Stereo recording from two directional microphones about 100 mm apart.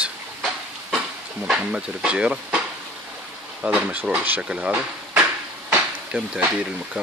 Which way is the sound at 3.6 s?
10° right (ahead or behind).